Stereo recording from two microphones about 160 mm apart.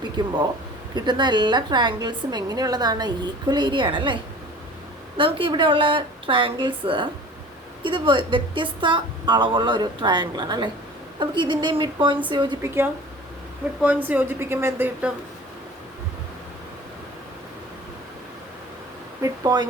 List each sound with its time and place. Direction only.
0.2 s a woman's voice: 30° right (ahead or behind)
13.8 s a woman's voice: 10° right (ahead or behind)
19.2 s a sound: 25° right (ahead or behind)